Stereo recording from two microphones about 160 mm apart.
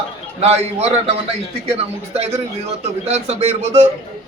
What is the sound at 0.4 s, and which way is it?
Speech, 40° right (ahead or behind).